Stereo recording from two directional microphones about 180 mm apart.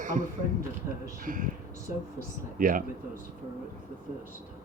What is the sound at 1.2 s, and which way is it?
Speech, 50° right (ahead or behind).